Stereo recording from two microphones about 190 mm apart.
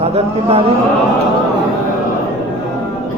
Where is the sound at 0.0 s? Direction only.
30° right (ahead or behind).